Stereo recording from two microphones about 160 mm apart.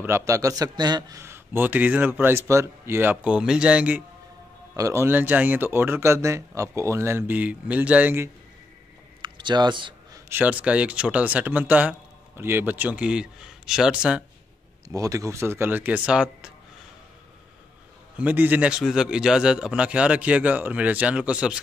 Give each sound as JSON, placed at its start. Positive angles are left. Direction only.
{"t": 0.0, "sound": "a man's voice", "side_deg": -15}
{"t": 4.7, "sound": "a man's voice", "side_deg": -20}
{"t": 9.2, "sound": "a sound", "side_deg": -30}
{"t": 10.3, "sound": "a man's voice", "side_deg": -10}
{"t": 14.9, "sound": "a man's voice", "side_deg": -20}
{"t": 18.2, "sound": "a man's voice", "side_deg": -10}